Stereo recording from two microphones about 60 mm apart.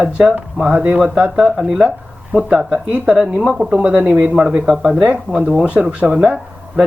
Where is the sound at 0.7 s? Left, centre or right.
Right.